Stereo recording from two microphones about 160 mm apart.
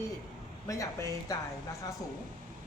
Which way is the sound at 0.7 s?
20° left (ahead or behind).